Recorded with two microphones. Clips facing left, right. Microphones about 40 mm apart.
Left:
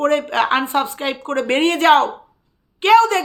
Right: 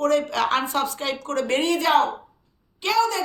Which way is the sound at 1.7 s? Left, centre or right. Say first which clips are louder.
Left 7 dB; left.